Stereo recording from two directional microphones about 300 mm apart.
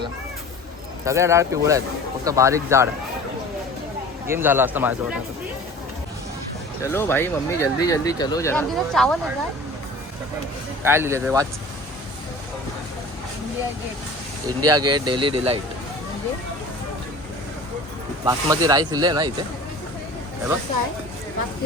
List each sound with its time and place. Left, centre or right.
1.0 s speech: centre
4.3 s speech: centre
6.8 s speech: centre
10.8 s speech: centre
14.6 s speech: right
15.0 s speech: centre
18.3 s speech: centre